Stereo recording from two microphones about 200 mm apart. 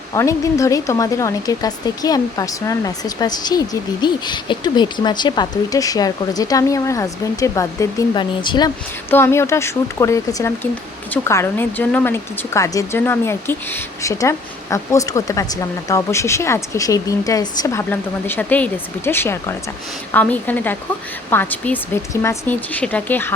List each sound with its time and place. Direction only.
0.1 s speech: 15° left (ahead or behind)
9.0 s speech: 10° left (ahead or behind)